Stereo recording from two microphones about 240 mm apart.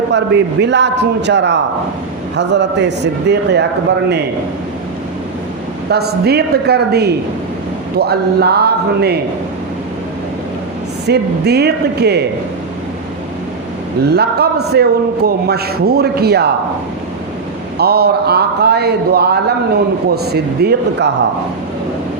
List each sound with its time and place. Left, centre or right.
0.1 s a man's voice: right
5.9 s a man's voice: right
11.0 s a man's voice: right
14.1 s a man's voice: right
17.7 s a man's voice: right